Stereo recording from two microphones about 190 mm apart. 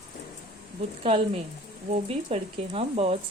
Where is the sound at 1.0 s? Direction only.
30° right (ahead or behind).